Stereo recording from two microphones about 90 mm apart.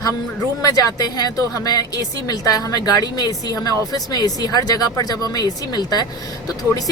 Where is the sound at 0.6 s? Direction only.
40° left (ahead or behind).